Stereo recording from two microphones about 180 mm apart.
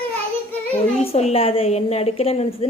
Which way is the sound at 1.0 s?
35° left (ahead or behind).